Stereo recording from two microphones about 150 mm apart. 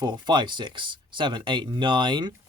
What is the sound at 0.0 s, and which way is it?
Speech, 30° right (ahead or behind).